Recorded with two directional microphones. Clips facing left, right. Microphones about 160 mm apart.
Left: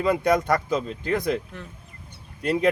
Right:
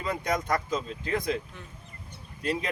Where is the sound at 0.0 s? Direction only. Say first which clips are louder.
Left 9 dB; 70° left (ahead or behind).